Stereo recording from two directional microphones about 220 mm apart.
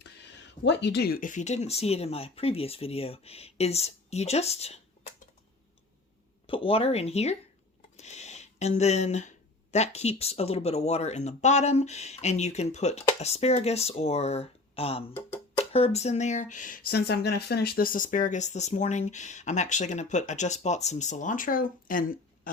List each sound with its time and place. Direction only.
0.6 s speech: 50° left (ahead or behind); by 5.1 s 30° left (ahead or behind)
6.5 s speech: 25° left (ahead or behind)
7.9 s a sound: 30° left (ahead or behind)
9.7 s speech: 30° left (ahead or behind)
16.9 s speech: 45° left (ahead or behind)